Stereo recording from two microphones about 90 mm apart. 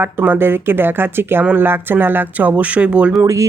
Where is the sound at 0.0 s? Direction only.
20° right (ahead or behind).